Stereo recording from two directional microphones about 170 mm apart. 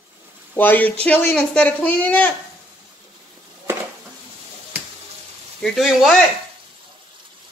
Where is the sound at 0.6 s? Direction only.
10° left (ahead or behind).